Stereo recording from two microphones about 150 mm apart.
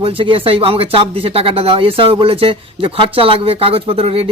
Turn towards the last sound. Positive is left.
turn(degrees=-40)  # may be behind; listen again after turning